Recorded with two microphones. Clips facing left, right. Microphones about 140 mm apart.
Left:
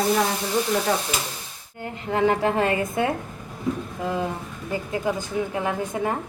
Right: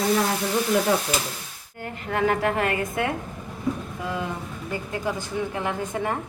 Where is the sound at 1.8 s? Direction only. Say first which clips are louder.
Left 3 dB; 20° left (ahead or behind).